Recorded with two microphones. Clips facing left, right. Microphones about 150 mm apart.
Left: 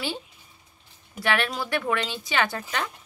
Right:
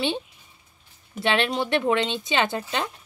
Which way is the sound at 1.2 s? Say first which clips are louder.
Right 3 dB; 25° right (ahead or behind).